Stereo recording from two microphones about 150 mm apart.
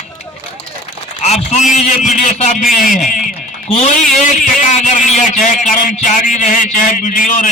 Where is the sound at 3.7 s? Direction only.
50° left (ahead or behind).